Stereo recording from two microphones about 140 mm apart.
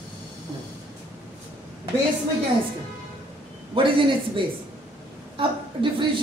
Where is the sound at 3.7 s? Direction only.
40° right (ahead or behind).